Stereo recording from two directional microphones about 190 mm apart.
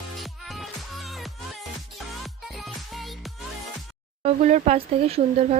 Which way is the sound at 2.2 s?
Centre (ahead or behind).